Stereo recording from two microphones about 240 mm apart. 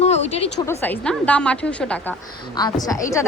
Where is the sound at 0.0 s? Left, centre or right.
Left.